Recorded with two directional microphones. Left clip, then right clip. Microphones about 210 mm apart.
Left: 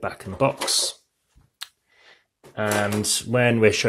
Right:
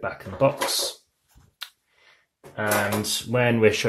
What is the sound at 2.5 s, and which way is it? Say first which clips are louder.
Speech: even; 35° left (ahead or behind).